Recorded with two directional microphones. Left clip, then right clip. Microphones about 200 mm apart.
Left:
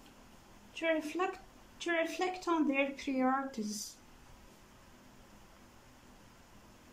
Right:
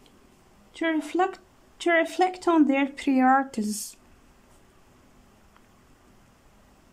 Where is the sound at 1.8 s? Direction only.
60° right (ahead or behind).